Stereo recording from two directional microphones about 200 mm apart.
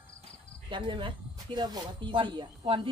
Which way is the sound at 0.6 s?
25° right (ahead or behind).